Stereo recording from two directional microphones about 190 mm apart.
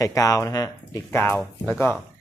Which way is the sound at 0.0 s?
20° left (ahead or behind).